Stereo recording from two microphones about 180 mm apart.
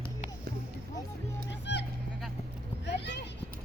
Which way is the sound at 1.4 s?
75° left (ahead or behind).